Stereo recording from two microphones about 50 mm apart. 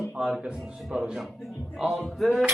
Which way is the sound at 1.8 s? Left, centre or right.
Centre.